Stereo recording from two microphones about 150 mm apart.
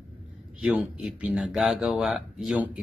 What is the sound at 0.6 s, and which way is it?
A man's voice, 5° right (ahead or behind).